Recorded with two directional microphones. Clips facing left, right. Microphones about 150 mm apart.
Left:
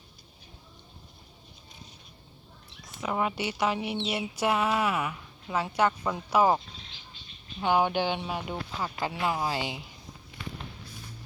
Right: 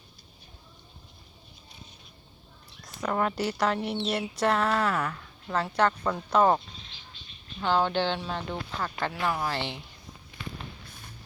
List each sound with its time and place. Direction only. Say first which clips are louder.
2.8 s a woman's voice: right 2 dB; 5° left (ahead or behind)
7.6 s a woman's voice: even; 15° left (ahead or behind)